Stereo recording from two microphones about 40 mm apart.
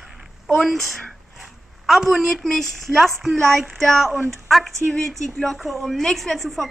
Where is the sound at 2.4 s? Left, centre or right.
Centre.